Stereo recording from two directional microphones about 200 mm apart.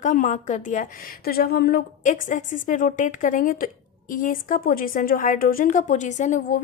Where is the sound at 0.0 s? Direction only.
40° left (ahead or behind).